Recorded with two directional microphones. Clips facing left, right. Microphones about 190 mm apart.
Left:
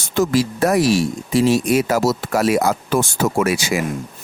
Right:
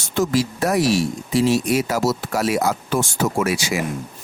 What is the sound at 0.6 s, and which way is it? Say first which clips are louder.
Speech: left 3 dB; 50° left (ahead or behind).